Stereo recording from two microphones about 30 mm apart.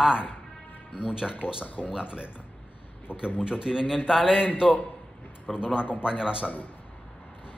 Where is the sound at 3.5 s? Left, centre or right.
Right.